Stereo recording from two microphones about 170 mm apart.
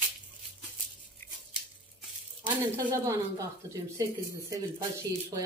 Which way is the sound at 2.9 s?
20° right (ahead or behind).